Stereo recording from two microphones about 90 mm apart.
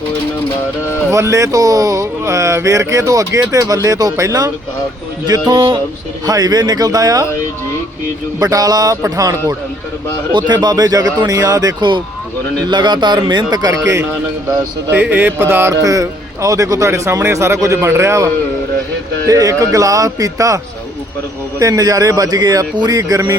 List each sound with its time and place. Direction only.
1.1 s speech: 35° right (ahead or behind)
5.2 s speech: 50° right (ahead or behind)
8.4 s speech: 45° right (ahead or behind)
10.3 s speech: 50° right (ahead or behind)
14.0 s a man's voice: 20° right (ahead or behind)
15.7 s speech: 40° right (ahead or behind)
21.6 s speech: 40° right (ahead or behind)